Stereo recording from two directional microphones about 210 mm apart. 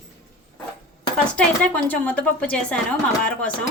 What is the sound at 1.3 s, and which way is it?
A woman's voice, 10° left (ahead or behind).